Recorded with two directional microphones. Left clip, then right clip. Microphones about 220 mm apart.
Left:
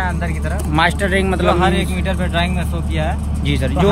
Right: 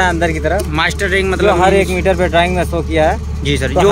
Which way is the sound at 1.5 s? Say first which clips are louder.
Right 7 dB; 25° right (ahead or behind).